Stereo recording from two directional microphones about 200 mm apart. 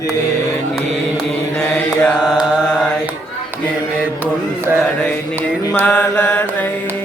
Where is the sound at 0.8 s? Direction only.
5° left (ahead or behind).